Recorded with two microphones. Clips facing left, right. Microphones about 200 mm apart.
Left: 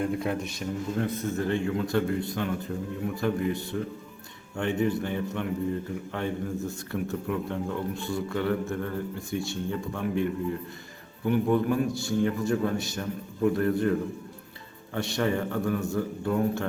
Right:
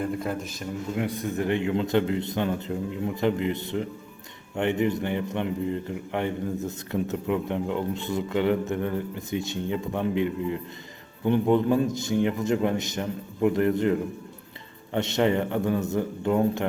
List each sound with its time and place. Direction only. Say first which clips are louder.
0.0 s speech: left 1 dB; centre (ahead or behind)
0.9 s a man's voice: right 2 dB; 15° right (ahead or behind)
14.9 s a man's voice: right 4 dB; 20° right (ahead or behind)